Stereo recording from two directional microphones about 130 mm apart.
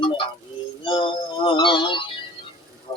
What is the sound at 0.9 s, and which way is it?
Synthetic singing, 40° left (ahead or behind).